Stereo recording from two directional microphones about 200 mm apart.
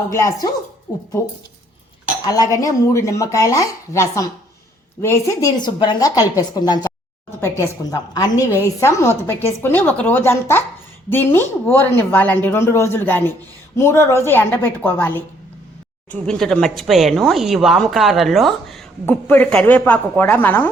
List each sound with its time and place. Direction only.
0.1 s speech: 15° left (ahead or behind)
16.2 s a woman's voice: 5° left (ahead or behind)